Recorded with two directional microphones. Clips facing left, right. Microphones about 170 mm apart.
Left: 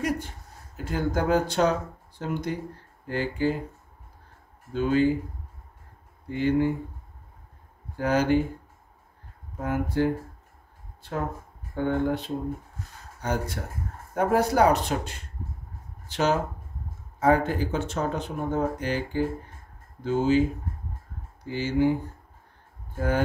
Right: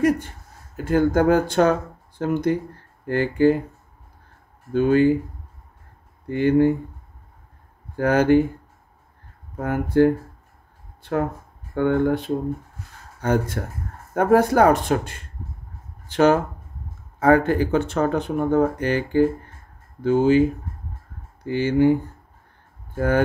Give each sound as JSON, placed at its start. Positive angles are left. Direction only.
{"t": 0.8, "sound": "speech", "side_deg": -55}
{"t": 4.7, "sound": "speech", "side_deg": -55}
{"t": 6.2, "sound": "speech", "side_deg": -60}
{"t": 8.0, "sound": "speech", "side_deg": -55}
{"t": 9.6, "sound": "speech", "side_deg": -55}
{"t": 11.0, "sound": "speech", "side_deg": -70}
{"t": 21.5, "sound": "speech", "side_deg": -60}
{"t": 22.9, "sound": "speech", "side_deg": -60}